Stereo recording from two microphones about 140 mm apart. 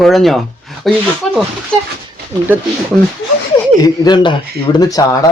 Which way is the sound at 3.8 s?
30° left (ahead or behind).